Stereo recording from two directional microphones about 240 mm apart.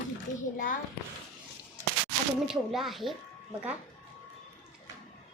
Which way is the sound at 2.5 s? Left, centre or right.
Centre.